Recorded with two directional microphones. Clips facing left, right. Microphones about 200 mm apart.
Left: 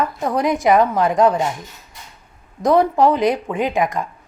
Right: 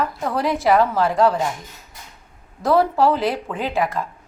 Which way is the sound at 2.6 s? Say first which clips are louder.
Left 2 dB; 15° left (ahead or behind).